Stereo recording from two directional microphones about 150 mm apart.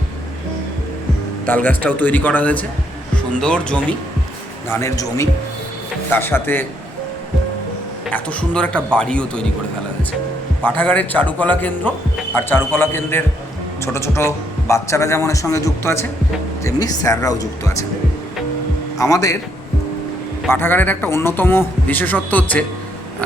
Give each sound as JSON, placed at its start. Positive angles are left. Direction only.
{"t": 1.5, "sound": "a man's voice", "side_deg": 10}
{"t": 4.7, "sound": "a man's voice", "side_deg": 20}
{"t": 8.1, "sound": "a man's voice", "side_deg": 10}
{"t": 10.8, "sound": "a man's voice", "side_deg": 10}
{"t": 18.9, "sound": "a man's voice", "side_deg": 20}
{"t": 20.5, "sound": "a man's voice", "side_deg": 15}